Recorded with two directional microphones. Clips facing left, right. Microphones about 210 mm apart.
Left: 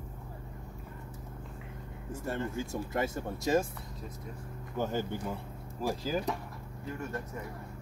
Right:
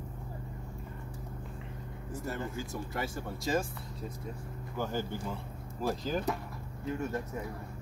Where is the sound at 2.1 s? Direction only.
25° left (ahead or behind).